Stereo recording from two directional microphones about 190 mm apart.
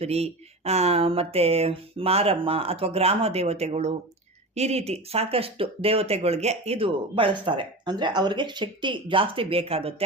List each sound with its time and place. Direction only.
0.0 s speech: 35° right (ahead or behind)